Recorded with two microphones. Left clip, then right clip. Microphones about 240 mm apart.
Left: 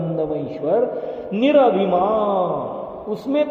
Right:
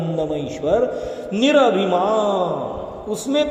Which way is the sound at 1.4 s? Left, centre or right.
Right.